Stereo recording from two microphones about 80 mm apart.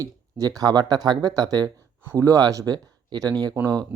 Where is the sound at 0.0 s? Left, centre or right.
Right.